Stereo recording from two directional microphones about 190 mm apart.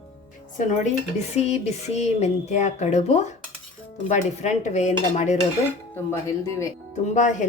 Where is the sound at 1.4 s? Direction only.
35° left (ahead or behind).